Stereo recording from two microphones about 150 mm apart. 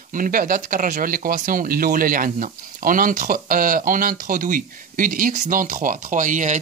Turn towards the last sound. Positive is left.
turn(degrees=-55)  # may be behind; listen again after turning